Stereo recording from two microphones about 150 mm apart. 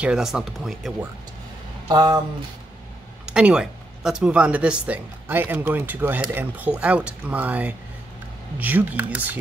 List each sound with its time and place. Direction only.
0.0 s speech: 5° right (ahead or behind)
1.9 s speech: 30° right (ahead or behind)
3.3 s speech: 5° right (ahead or behind)